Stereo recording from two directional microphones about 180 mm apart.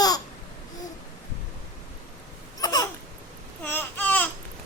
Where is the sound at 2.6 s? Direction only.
20° left (ahead or behind).